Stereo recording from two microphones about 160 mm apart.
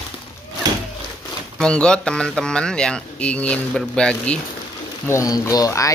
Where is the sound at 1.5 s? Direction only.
5° left (ahead or behind).